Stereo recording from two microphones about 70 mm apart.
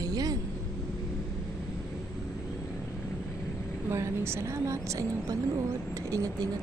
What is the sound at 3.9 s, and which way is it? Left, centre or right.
Speech, right.